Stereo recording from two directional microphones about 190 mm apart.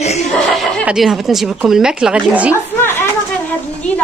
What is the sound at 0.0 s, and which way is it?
Chuckle, 35° left (ahead or behind).